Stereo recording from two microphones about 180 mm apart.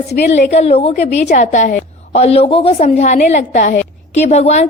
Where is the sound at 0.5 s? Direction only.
35° left (ahead or behind).